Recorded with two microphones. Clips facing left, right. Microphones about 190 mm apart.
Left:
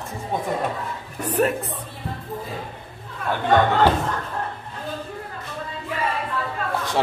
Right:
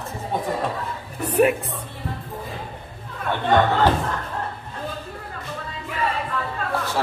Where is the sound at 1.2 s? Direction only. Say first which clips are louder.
Right 3 dB; 10° right (ahead or behind).